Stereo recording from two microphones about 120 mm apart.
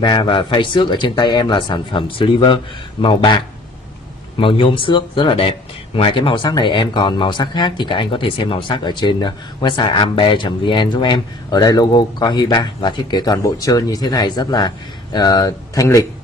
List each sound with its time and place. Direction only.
0.0 s speech: 40° left (ahead or behind)